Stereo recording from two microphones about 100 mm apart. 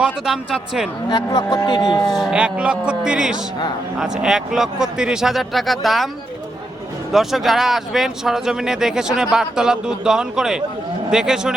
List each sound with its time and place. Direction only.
0.0 s speech: 5° right (ahead or behind)
1.1 s speech: 45° left (ahead or behind)
2.0 s speech: centre (ahead or behind)
2.4 s a man's voice: 10° right (ahead or behind)
7.1 s speech: 5° right (ahead or behind)